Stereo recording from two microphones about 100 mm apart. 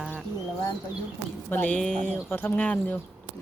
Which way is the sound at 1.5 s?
15° left (ahead or behind).